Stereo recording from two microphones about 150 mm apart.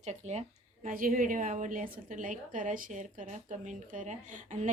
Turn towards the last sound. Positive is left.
turn(degrees=-55)  # may be behind; listen again after turning